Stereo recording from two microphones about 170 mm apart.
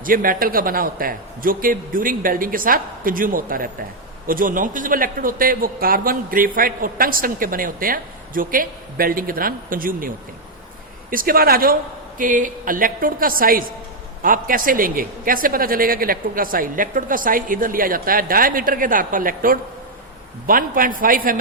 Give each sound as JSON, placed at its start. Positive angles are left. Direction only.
{"t": 0.0, "sound": "a man's voice", "side_deg": -55}
{"t": 11.1, "sound": "a man's voice", "side_deg": -55}